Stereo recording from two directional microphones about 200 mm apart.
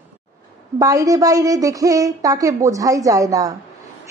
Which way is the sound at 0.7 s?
15° right (ahead or behind).